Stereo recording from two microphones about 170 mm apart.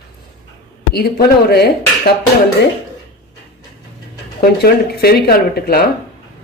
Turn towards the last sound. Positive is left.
turn(degrees=65)  # may be behind; listen again after turning